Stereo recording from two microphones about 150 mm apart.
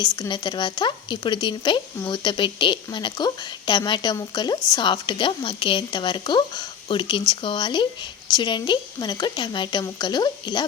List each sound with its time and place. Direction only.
0.0 s speech: 30° left (ahead or behind)